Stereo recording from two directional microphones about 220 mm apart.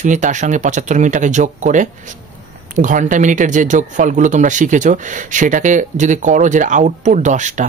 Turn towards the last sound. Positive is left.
turn(degrees=-35)  # may be behind; listen again after turning